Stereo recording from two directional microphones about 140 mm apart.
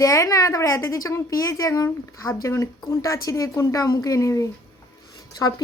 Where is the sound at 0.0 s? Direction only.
25° left (ahead or behind).